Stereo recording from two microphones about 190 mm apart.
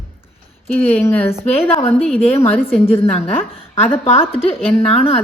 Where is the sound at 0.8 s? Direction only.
10° left (ahead or behind).